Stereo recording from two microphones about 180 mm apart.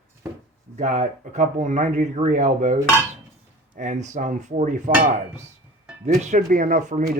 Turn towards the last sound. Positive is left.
turn(degrees=-45)  # may be behind; listen again after turning